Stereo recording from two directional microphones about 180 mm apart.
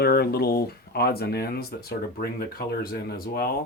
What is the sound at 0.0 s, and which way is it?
Speech, 60° left (ahead or behind).